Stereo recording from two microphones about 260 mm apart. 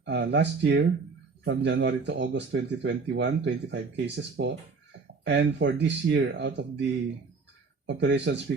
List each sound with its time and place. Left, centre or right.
0.0 s speech: right
7.9 s speech: right